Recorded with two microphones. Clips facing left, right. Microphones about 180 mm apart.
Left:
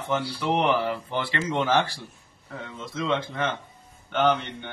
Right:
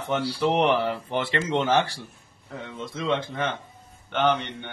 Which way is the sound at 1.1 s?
20° right (ahead or behind).